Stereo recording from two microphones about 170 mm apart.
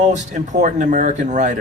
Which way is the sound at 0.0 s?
45° right (ahead or behind).